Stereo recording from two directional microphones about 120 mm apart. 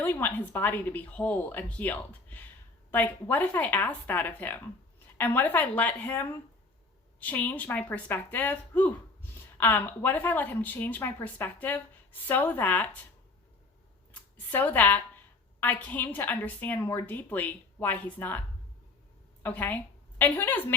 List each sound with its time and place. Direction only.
0.0 s a woman's voice: 15° left (ahead or behind)
14.1 s a sound: 15° left (ahead or behind)
15.6 s a woman's voice: 15° left (ahead or behind)